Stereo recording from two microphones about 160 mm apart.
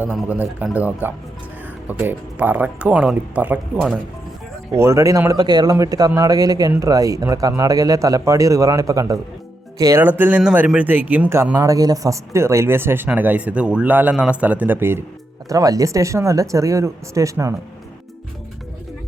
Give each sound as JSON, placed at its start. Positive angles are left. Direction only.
{"t": 0.0, "sound": "speech", "side_deg": -10}
{"t": 4.7, "sound": "speech", "side_deg": -15}